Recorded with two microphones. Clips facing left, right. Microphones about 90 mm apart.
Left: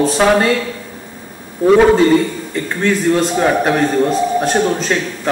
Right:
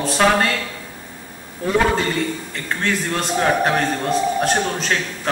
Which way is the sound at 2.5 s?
5° left (ahead or behind).